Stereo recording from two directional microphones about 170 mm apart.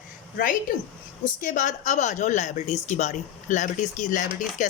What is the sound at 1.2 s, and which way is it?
Speech, 50° left (ahead or behind).